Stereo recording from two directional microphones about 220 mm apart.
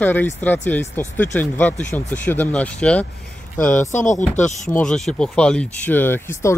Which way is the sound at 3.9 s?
35° left (ahead or behind).